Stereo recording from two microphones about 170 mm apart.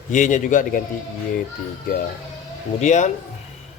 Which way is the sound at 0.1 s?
45° left (ahead or behind).